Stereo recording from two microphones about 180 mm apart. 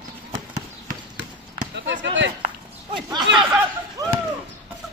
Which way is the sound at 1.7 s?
90° right.